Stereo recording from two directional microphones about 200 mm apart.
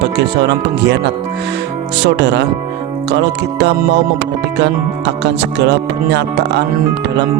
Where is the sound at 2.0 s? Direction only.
60° right (ahead or behind).